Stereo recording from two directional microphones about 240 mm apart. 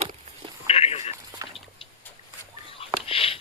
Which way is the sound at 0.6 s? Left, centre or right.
Left.